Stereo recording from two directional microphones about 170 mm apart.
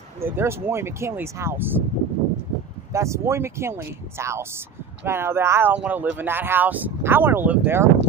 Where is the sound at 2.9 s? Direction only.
15° right (ahead or behind).